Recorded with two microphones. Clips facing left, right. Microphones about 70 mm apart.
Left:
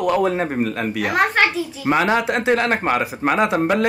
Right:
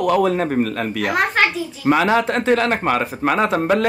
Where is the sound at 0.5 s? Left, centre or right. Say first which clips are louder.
Right 1 dB; centre.